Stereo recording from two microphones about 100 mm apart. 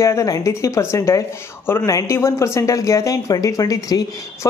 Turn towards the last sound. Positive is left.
turn(degrees=35)  # may be behind; listen again after turning